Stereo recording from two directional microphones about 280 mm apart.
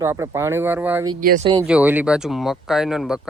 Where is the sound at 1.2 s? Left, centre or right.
Right.